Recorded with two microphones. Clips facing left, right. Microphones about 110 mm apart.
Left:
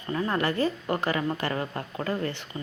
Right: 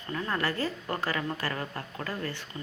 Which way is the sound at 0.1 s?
20° left (ahead or behind).